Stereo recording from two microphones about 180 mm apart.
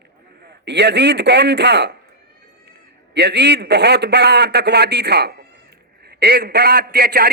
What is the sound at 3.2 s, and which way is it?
A man's voice, 70° right (ahead or behind).